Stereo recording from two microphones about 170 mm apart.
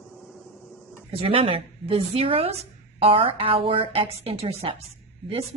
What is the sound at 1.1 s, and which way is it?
A woman's voice, 35° right (ahead or behind).